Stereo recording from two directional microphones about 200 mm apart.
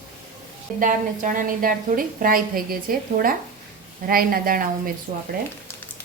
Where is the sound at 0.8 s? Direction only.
40° right (ahead or behind).